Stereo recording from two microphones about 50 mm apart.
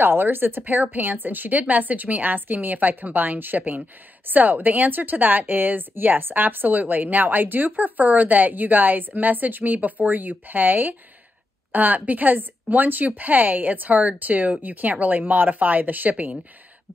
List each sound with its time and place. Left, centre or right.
0.0 s speech: right